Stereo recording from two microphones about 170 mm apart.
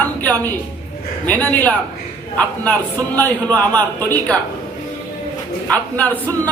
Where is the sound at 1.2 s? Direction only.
10° left (ahead or behind).